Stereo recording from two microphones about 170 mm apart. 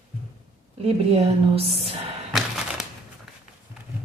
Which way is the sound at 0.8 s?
35° right (ahead or behind).